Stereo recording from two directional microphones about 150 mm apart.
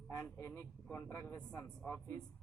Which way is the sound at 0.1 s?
15° left (ahead or behind).